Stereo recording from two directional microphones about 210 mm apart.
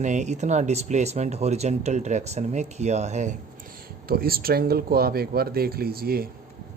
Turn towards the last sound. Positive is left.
turn(degrees=-45)  # may be behind; listen again after turning